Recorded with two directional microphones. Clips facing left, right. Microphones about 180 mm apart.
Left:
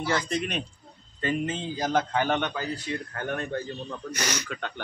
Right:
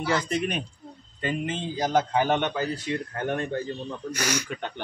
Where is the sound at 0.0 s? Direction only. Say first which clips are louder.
Right 2 dB; 10° right (ahead or behind).